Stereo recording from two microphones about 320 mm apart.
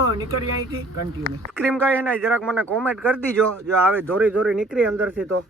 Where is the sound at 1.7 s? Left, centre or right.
Centre.